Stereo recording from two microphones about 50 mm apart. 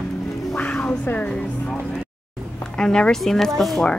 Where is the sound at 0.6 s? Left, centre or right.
Left.